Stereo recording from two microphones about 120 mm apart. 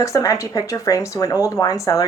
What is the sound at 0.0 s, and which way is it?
Speech, 25° left (ahead or behind).